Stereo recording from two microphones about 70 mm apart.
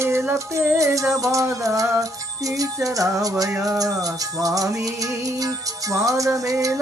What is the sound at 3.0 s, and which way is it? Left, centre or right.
Music, right.